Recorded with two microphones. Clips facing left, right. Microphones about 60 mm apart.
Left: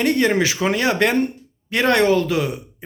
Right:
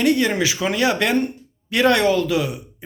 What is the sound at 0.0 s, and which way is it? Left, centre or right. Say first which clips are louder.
A man's voice: left 1 dB; left.